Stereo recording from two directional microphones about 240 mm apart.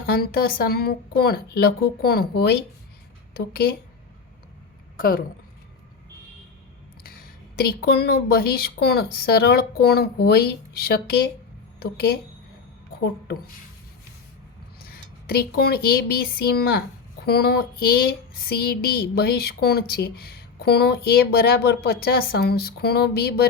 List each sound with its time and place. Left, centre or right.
0.0 s speech: left
4.9 s speech: left
7.5 s a woman's voice: left
14.8 s speech: left